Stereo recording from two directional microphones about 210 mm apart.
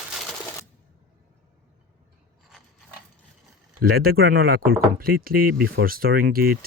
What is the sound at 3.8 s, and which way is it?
Speech, 45° right (ahead or behind).